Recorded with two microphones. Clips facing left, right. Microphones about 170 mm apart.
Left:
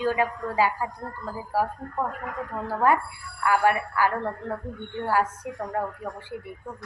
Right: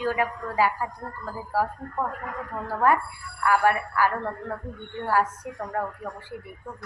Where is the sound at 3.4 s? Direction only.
25° left (ahead or behind).